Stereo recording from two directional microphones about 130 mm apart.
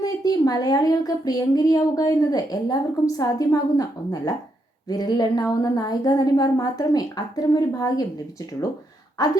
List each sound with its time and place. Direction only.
0.0 s a woman's voice: 30° left (ahead or behind)
9.1 s speech: 30° left (ahead or behind)